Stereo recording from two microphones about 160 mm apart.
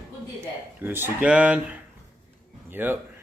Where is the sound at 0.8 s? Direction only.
15° right (ahead or behind).